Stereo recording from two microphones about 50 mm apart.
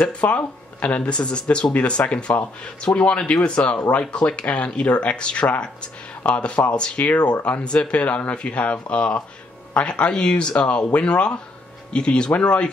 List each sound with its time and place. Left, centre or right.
0.1 s speech: left